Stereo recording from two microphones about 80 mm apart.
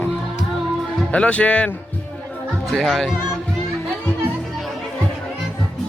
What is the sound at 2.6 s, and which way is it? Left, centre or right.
Speech, centre.